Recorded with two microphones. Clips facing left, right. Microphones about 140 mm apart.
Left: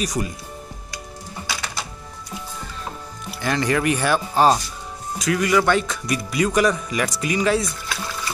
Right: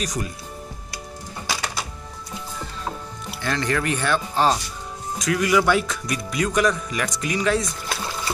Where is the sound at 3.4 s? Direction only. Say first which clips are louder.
Left 3 dB; 10° left (ahead or behind).